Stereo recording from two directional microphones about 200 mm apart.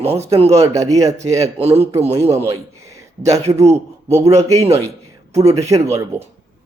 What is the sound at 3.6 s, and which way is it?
Speech, 35° right (ahead or behind).